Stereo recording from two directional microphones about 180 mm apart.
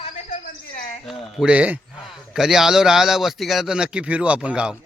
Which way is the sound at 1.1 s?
5° right (ahead or behind).